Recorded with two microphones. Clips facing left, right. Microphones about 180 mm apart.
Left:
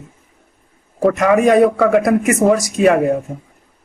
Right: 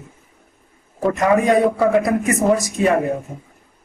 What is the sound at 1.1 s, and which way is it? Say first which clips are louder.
A man's voice: left 3 dB; 80° left.